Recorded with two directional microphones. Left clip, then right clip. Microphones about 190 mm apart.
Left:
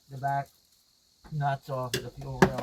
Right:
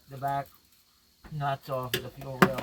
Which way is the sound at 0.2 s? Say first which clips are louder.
Left 1 dB; 20° right (ahead or behind).